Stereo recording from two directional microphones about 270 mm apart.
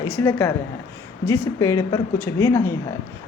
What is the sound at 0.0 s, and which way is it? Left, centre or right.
Speech, centre.